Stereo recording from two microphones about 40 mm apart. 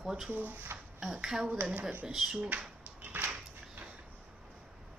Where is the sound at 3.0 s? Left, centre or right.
Right.